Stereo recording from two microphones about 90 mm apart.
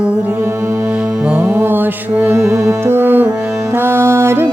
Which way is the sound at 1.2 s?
15° right (ahead or behind).